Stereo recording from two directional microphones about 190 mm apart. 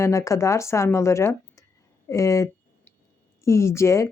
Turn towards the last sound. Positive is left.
turn(degrees=15)  # may be behind; listen again after turning